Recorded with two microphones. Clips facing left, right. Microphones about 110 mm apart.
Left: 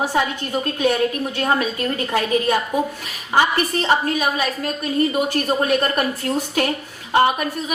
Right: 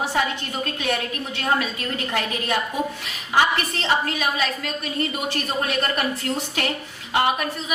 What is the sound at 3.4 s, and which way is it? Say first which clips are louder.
A woman's voice: left 3 dB; 45° left (ahead or behind).